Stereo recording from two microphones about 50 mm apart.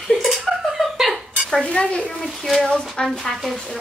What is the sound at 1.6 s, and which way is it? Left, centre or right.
Speech, centre.